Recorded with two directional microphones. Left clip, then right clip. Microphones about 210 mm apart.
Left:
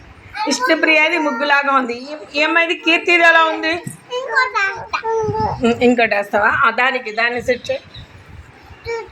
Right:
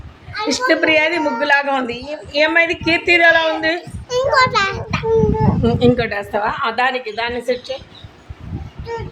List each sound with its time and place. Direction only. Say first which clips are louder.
0.4 s a woman's voice: even; 15° right (ahead or behind)
4.3 s a child's voice: right 2 dB; 45° right (ahead or behind)
4.9 s a woman's voice: right 2 dB; 5° right (ahead or behind)
5.8 s a woman's voice: left 3 dB; 10° left (ahead or behind)